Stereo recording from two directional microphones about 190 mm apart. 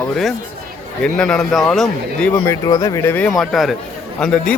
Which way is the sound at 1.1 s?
5° left (ahead or behind).